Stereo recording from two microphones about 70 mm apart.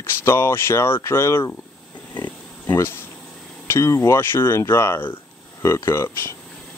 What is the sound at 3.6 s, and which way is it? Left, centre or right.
Speech, left.